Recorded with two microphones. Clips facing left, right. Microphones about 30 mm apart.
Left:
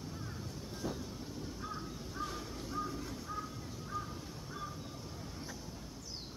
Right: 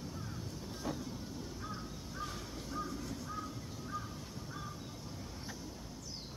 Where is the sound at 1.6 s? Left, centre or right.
Centre.